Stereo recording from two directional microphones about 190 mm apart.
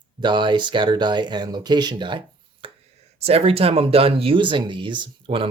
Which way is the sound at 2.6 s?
30° right (ahead or behind).